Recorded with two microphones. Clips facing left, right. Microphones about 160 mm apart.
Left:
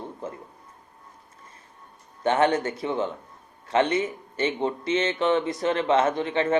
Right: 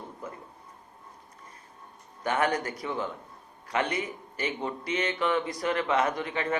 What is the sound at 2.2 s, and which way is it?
Speech, 25° left (ahead or behind).